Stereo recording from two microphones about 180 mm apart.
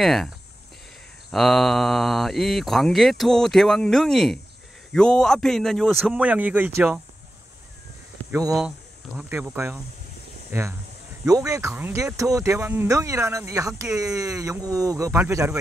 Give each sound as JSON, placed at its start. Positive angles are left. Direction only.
{"t": 0.0, "sound": "speech", "side_deg": 0}
{"t": 1.3, "sound": "speech", "side_deg": 0}
{"t": 8.3, "sound": "speech", "side_deg": -20}
{"t": 8.5, "sound": "speech", "side_deg": -5}
{"t": 11.2, "sound": "speech", "side_deg": -20}